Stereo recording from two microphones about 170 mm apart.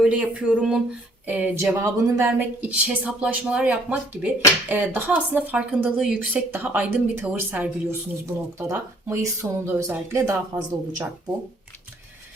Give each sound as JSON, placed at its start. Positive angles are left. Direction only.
{"t": 0.0, "sound": "speech", "side_deg": -5}